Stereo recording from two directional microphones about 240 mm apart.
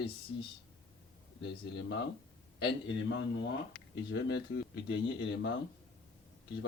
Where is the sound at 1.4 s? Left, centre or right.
Left.